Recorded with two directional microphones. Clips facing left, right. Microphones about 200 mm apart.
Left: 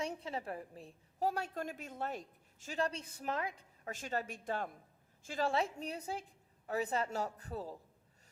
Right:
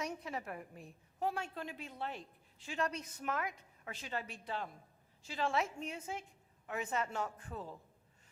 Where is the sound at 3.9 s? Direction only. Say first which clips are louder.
Left 4 dB; 45° left (ahead or behind).